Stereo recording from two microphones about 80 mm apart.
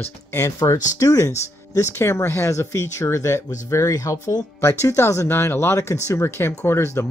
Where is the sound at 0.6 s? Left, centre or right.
Left.